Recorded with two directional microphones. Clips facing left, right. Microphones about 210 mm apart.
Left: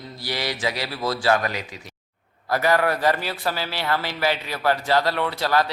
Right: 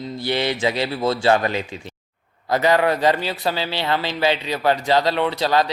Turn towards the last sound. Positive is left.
turn(degrees=-20)  # may be behind; listen again after turning